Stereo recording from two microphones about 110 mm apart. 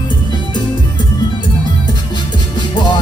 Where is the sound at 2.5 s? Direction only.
45° left (ahead or behind).